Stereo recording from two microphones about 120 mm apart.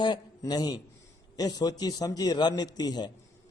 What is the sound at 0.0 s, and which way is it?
Speech, 35° left (ahead or behind).